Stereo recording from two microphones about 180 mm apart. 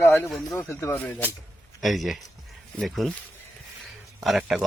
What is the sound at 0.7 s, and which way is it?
Speech, 15° left (ahead or behind).